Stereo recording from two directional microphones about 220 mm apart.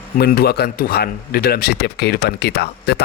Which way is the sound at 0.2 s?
45° left (ahead or behind).